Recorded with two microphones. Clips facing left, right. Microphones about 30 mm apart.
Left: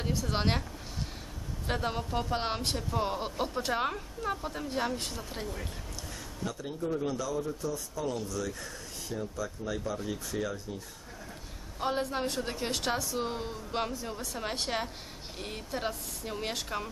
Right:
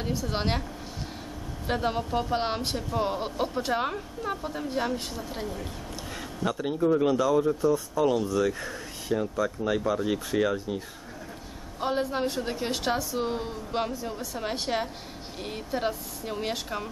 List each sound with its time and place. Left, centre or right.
0.0 s a woman's voice: centre
1.7 s speech: centre
6.4 s speech: right
8.0 s speech: right
8.3 s speech: right
11.8 s a woman's voice: centre